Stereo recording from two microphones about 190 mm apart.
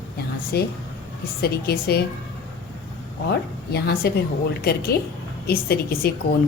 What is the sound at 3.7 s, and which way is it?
Speech, 55° left (ahead or behind).